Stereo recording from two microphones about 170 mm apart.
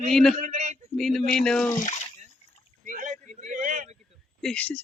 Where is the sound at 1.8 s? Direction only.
45° left (ahead or behind).